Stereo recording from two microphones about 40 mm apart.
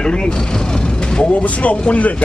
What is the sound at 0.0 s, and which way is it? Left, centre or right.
Speech, left.